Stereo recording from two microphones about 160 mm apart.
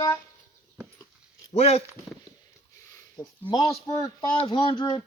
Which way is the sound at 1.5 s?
40° left (ahead or behind).